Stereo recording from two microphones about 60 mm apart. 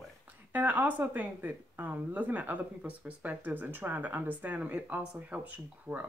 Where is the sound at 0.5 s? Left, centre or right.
Right.